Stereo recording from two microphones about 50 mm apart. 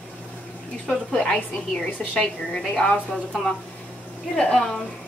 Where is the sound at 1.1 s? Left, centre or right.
Centre.